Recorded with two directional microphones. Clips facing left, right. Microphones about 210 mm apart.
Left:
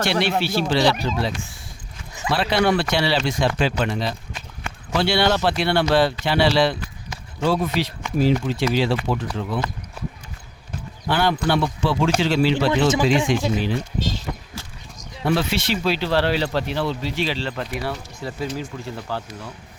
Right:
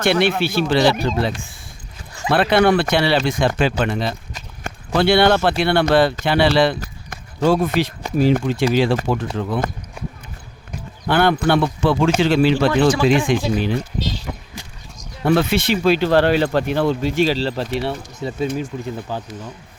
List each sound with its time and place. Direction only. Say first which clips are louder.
0.0 s speech: right 4 dB; 55° right (ahead or behind)
6.7 s speech: right 2 dB; 45° right (ahead or behind)
11.1 s speech: right 4 dB; 55° right (ahead or behind)
12.7 s speech: right 3 dB; 20° left (ahead or behind)
13.1 s speech: right 3 dB; 55° right (ahead or behind)
15.2 s speech: right 5 dB; 55° right (ahead or behind); by 19.5 s 10° right (ahead or behind)